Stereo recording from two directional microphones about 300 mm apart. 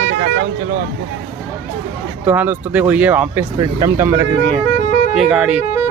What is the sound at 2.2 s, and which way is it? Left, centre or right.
Speech, centre.